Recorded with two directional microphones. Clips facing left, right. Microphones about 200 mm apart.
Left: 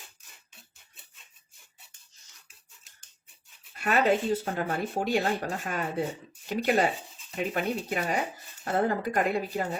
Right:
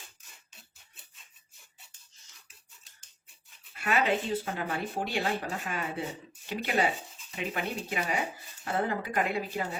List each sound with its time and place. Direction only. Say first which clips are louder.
3.8 s speech: left 4 dB; 40° left (ahead or behind)